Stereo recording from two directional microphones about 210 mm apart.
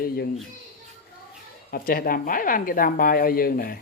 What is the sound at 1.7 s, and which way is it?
Speech, 45° left (ahead or behind).